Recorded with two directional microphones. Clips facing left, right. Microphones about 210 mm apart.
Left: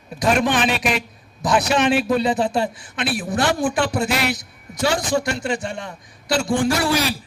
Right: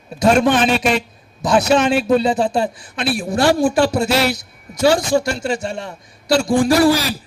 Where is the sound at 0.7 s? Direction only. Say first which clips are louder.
Right 5 dB; 30° right (ahead or behind).